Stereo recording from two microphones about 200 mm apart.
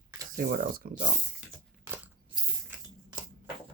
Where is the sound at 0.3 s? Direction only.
45° right (ahead or behind).